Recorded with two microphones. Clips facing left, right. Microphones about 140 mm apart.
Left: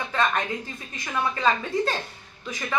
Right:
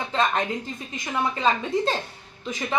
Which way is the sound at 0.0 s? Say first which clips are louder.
Right 1 dB; 20° right (ahead or behind).